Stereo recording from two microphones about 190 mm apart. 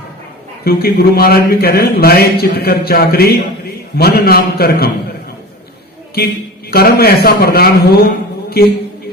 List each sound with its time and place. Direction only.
0.6 s a man's voice: 55° left (ahead or behind)
6.7 s a man's voice: 55° left (ahead or behind)